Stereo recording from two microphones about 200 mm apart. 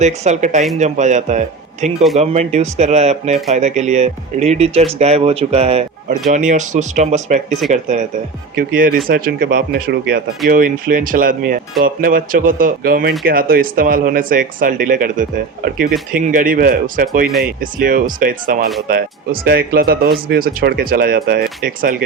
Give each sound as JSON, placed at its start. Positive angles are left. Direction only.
{"t": 0.0, "sound": "speech", "side_deg": -35}